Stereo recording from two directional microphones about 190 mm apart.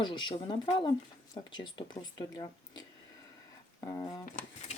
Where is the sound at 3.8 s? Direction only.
20° left (ahead or behind).